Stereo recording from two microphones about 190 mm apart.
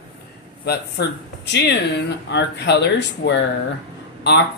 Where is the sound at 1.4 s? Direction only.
65° left (ahead or behind).